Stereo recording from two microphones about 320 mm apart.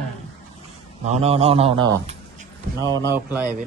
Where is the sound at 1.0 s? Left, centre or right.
Centre.